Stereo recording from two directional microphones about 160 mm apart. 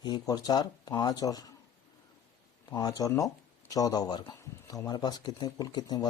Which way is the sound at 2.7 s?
25° left (ahead or behind).